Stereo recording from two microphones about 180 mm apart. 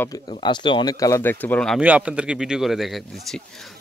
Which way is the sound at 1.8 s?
10° right (ahead or behind).